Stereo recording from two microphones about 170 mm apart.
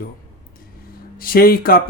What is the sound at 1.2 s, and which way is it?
Speech, 60° left (ahead or behind).